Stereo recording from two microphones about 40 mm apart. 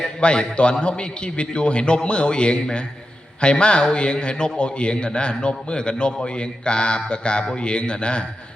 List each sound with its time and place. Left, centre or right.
0.0 s a man's voice: left